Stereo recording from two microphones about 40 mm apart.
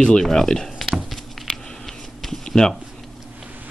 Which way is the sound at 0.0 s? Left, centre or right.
Centre.